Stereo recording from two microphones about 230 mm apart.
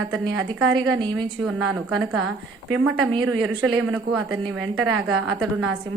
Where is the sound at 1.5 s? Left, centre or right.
Centre.